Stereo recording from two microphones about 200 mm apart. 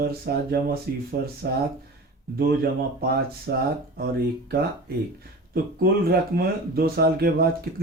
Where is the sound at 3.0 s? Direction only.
50° right (ahead or behind).